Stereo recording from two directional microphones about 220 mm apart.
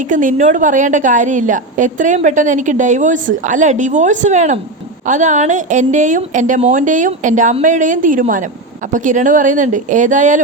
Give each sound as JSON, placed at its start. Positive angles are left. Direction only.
{"t": 0.1, "sound": "a woman's voice", "side_deg": -35}